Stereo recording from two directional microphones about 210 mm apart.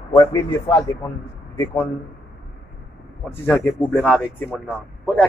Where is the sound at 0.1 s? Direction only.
20° left (ahead or behind).